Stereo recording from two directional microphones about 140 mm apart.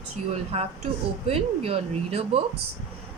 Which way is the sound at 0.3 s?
45° right (ahead or behind).